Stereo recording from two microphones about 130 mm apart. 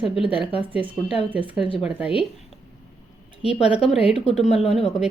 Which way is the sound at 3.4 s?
5° right (ahead or behind).